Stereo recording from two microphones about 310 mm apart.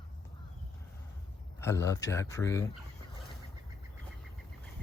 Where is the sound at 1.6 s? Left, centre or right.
Centre.